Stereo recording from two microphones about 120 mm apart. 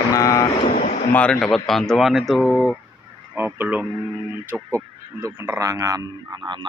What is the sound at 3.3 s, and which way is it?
Speech, 15° right (ahead or behind).